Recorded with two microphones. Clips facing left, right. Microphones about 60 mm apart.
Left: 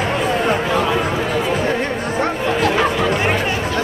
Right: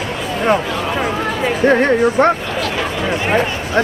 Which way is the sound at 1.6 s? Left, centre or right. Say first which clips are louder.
Right 8 dB; right.